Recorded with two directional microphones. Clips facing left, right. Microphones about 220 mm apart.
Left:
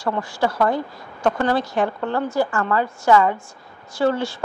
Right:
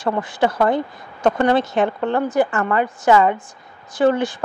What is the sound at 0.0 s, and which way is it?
A woman's voice, 20° right (ahead or behind).